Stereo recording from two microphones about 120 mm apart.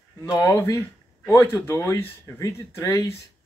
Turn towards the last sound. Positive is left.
turn(degrees=25)  # may be behind; listen again after turning